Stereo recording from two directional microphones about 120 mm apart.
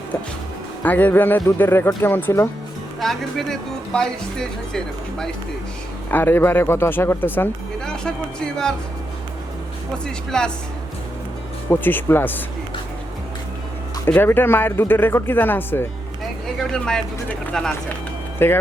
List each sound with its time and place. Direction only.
0.8 s speech: 15° left (ahead or behind)
3.0 s speech: centre (ahead or behind)
6.1 s speech: 15° left (ahead or behind)
10.3 s speech: 5° left (ahead or behind)
11.7 s speech: 15° left (ahead or behind)
14.1 s speech: 15° left (ahead or behind)
16.6 s speech: 5° left (ahead or behind)